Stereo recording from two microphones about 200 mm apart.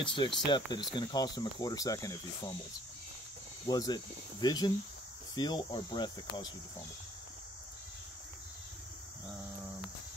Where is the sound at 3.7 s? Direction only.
20° left (ahead or behind).